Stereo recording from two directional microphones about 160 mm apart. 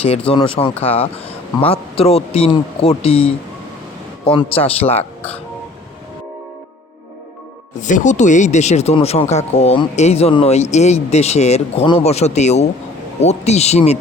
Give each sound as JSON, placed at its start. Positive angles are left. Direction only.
{"t": 0.3, "sound": "speech", "side_deg": 35}
{"t": 7.8, "sound": "speech", "side_deg": 50}